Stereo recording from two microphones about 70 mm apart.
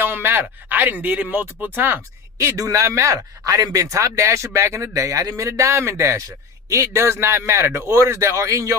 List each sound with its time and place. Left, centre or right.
0.0 s speech: right
2.6 s speech: right